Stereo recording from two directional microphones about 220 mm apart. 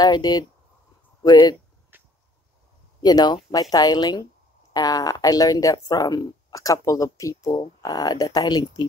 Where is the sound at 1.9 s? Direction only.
10° right (ahead or behind).